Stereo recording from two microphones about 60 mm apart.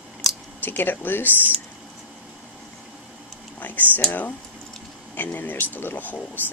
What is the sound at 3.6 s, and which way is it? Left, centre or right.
Speech, left.